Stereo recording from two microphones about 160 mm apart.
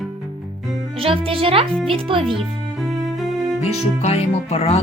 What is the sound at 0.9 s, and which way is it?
A child's voice, 35° right (ahead or behind).